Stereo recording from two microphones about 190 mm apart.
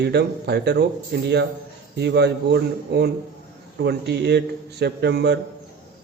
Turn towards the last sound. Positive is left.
turn(degrees=-60)  # may be behind; listen again after turning